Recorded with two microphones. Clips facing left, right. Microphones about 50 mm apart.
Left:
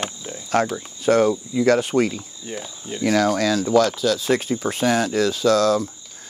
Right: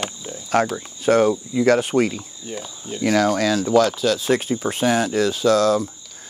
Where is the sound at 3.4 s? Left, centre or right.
Right.